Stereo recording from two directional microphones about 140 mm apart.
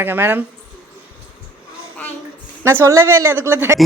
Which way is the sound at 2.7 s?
20° right (ahead or behind).